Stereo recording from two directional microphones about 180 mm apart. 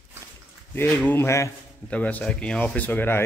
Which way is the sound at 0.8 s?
10° left (ahead or behind).